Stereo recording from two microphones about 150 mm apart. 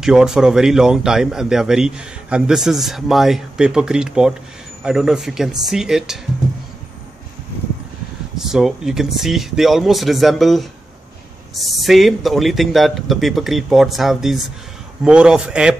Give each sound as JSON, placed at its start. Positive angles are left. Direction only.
{"t": 0.0, "sound": "speech", "side_deg": -5}
{"t": 8.4, "sound": "a man's voice", "side_deg": 0}